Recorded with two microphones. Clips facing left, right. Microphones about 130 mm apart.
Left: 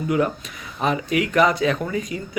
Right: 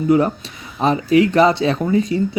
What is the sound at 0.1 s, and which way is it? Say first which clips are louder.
Speech: right 6 dB; 30° right (ahead or behind).